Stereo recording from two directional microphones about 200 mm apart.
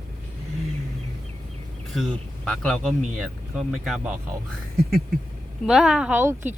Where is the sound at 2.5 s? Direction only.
5° left (ahead or behind).